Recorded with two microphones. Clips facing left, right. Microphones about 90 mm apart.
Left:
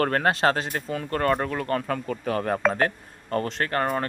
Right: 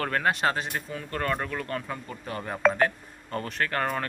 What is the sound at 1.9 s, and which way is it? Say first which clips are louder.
Speech: left 8 dB; 80° left.